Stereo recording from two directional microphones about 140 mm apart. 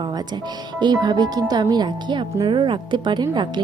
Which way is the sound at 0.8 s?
30° right (ahead or behind).